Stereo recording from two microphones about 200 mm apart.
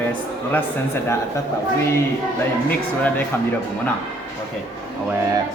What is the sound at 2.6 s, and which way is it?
Speech, 10° left (ahead or behind).